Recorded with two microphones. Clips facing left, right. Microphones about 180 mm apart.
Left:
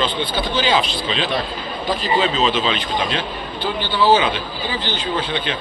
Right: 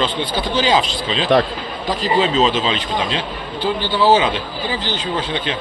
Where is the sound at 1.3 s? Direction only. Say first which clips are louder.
Right 13 dB; 90° right.